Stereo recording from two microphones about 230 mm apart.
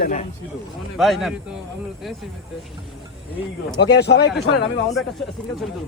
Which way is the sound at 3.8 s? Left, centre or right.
Left.